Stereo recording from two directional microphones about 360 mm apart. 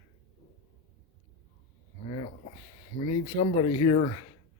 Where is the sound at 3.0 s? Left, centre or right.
Left.